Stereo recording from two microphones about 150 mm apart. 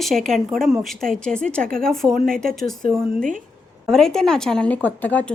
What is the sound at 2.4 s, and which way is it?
A woman's voice, 5° left (ahead or behind).